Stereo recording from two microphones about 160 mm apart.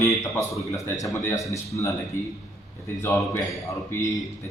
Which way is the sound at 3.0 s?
20° left (ahead or behind).